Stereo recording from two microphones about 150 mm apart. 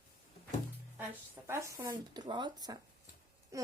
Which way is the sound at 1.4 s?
20° right (ahead or behind).